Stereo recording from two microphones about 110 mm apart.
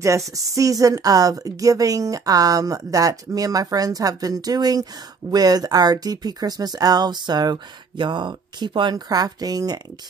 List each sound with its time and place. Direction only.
0.0 s speech: 30° right (ahead or behind)